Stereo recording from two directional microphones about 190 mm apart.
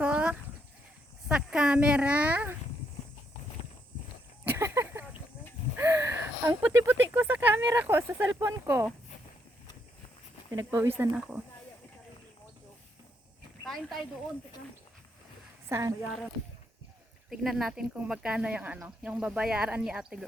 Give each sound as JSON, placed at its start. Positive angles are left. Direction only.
{"t": 0.0, "sound": "a sound", "side_deg": -5}
{"t": 4.4, "sound": "a sound", "side_deg": -15}
{"t": 5.7, "sound": "speech", "side_deg": -15}
{"t": 10.5, "sound": "speech", "side_deg": -20}
{"t": 15.7, "sound": "speech", "side_deg": -15}
{"t": 17.2, "sound": "speech", "side_deg": 0}